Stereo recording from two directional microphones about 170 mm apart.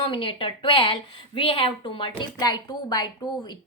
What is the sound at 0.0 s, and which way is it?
A woman's voice, 30° left (ahead or behind).